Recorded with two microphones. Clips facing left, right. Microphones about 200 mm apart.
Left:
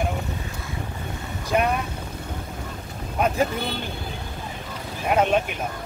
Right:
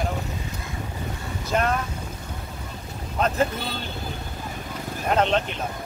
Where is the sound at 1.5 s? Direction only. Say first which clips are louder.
Left 2 dB; 10° left (ahead or behind).